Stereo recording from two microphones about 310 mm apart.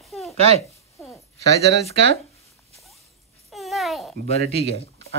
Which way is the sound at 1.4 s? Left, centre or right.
Centre.